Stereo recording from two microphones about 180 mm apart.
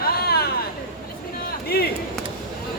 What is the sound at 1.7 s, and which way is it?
Speech, 60° left (ahead or behind).